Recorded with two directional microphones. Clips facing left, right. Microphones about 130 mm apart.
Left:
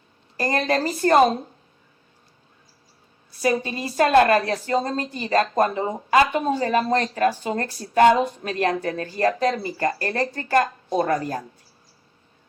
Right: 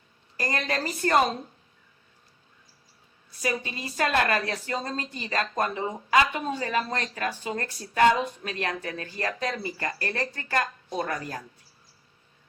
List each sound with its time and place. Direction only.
0.3 s a woman's voice: 30° left (ahead or behind)
3.4 s a woman's voice: 35° left (ahead or behind)